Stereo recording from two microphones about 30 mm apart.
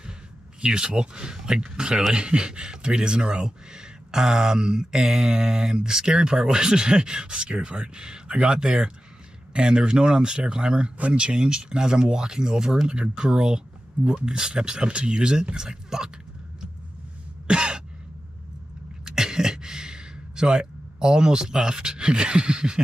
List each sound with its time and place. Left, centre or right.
0.6 s speech: right
17.5 s throat clearing: right
19.0 s a sound: right